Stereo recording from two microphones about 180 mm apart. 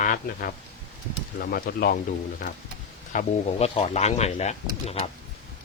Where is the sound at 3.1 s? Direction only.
40° left (ahead or behind).